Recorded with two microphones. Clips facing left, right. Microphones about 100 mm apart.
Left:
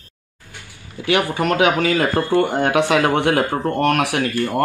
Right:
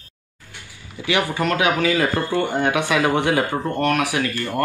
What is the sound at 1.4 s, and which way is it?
Speech, 60° left (ahead or behind).